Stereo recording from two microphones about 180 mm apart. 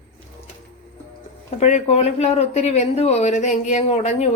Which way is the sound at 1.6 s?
40° left (ahead or behind).